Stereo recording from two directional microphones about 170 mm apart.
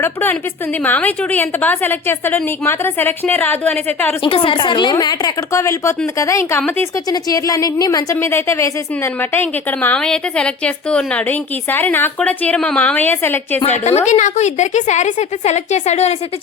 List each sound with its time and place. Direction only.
0.0 s a woman's voice: 10° left (ahead or behind)
4.2 s a woman's voice: 30° left (ahead or behind); by 6.8 s 10° left (ahead or behind)
7.1 s a woman's voice: 20° left (ahead or behind)
13.8 s a woman's voice: 40° left (ahead or behind)